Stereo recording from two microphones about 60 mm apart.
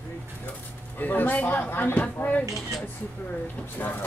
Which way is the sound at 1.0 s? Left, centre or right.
Left.